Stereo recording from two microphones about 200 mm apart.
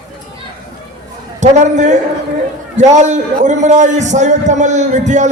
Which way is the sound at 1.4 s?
35° right (ahead or behind).